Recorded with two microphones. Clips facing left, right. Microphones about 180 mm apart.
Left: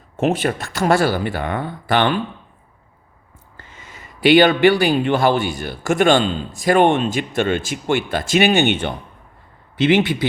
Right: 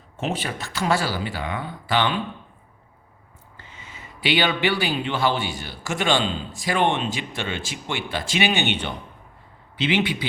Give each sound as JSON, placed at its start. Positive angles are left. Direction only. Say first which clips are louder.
{"t": 0.2, "sound": "speech", "louder": "left 9 dB", "side_deg": 50}
{"t": 3.6, "sound": "speech", "louder": "left 2 dB", "side_deg": 45}